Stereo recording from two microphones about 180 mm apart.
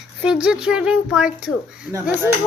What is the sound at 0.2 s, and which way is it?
A woman's voice, 5° right (ahead or behind).